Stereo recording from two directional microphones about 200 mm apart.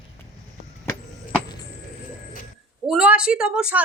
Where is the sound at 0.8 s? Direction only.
10° left (ahead or behind).